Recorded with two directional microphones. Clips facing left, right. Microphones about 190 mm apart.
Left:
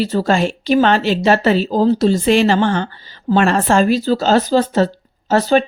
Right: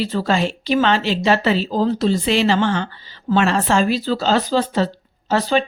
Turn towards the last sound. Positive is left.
turn(degrees=45)  # may be behind; listen again after turning